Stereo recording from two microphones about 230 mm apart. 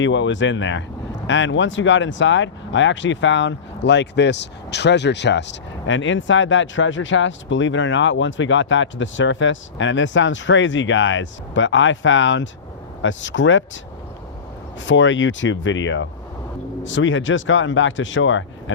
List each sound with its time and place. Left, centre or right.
0.0 s speech: left
14.8 s speech: left